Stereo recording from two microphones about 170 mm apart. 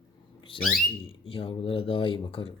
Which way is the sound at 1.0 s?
30° left (ahead or behind).